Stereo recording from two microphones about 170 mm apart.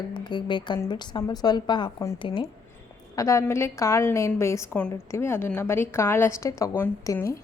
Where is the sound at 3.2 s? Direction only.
15° left (ahead or behind).